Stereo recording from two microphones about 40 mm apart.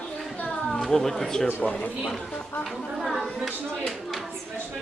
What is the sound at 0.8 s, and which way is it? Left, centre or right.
Speech, centre.